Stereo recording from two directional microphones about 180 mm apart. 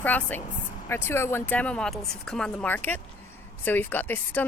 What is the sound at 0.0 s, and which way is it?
Speech, 10° left (ahead or behind).